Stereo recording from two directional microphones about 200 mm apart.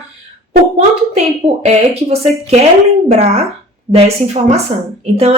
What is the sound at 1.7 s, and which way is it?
Speech, 30° right (ahead or behind).